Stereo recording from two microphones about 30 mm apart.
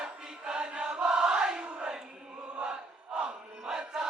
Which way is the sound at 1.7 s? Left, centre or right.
Right.